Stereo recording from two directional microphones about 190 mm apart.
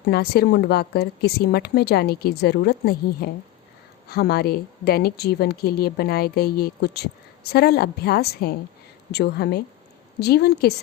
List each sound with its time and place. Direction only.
0.1 s a woman's voice: 55° left (ahead or behind)